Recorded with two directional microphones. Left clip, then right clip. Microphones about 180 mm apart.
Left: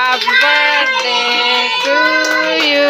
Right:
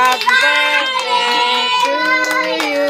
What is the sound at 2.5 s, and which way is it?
Music, centre (ahead or behind).